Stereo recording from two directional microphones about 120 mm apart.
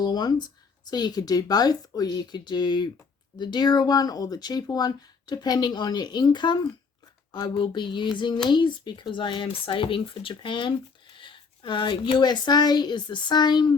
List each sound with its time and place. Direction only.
0.0 s speech: 35° left (ahead or behind)